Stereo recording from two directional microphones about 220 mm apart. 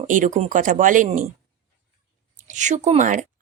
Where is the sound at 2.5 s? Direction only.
35° right (ahead or behind).